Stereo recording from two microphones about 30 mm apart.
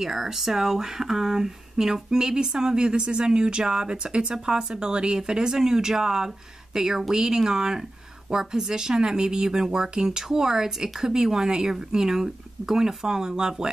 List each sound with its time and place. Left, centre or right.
0.0 s speech: centre